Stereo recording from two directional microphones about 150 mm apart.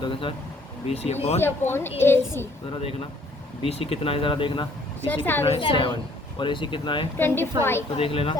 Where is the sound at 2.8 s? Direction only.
40° left (ahead or behind).